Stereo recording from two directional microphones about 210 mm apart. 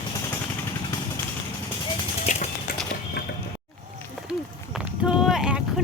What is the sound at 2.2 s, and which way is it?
Clip-clop, 35° left (ahead or behind).